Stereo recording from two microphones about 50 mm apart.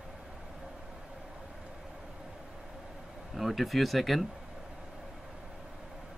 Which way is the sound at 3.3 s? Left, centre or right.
Centre.